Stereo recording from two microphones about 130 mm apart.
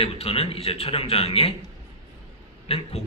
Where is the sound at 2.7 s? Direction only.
50° left (ahead or behind).